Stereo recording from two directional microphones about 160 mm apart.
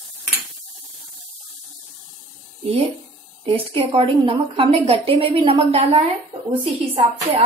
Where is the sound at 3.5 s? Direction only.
35° right (ahead or behind).